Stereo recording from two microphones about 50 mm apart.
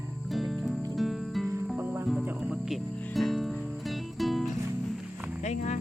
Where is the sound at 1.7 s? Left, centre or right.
Right.